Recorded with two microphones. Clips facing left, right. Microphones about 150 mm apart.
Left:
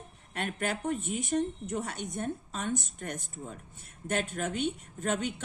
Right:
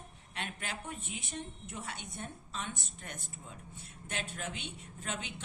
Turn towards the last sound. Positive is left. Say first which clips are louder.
# left 10 dB
turn(degrees=45)  # may be behind; listen again after turning